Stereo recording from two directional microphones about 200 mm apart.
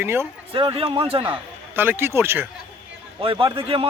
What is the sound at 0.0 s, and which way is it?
Speech, 10° right (ahead or behind).